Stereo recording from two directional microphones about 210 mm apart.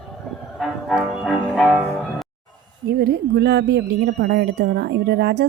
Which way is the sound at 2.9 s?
50° right (ahead or behind).